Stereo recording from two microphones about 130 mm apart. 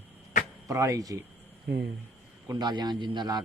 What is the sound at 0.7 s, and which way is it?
Speech, 25° right (ahead or behind).